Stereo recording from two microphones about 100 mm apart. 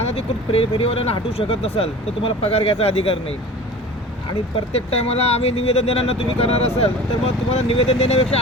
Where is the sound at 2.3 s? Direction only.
75° left (ahead or behind).